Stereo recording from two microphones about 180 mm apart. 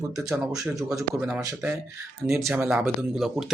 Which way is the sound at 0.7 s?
20° right (ahead or behind).